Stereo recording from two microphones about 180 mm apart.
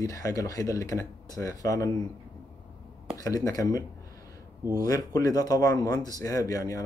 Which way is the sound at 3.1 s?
20° left (ahead or behind).